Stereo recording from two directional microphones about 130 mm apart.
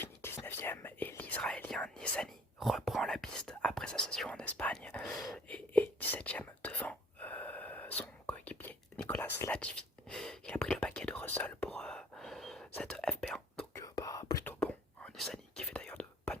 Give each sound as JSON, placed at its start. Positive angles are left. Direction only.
{"t": 0.0, "sound": "whispering", "side_deg": 20}
{"t": 13.7, "sound": "whispering", "side_deg": 25}
{"t": 14.4, "sound": "whispering", "side_deg": 10}